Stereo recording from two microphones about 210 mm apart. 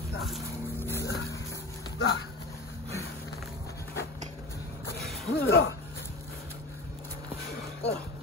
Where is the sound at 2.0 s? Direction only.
70° left (ahead or behind).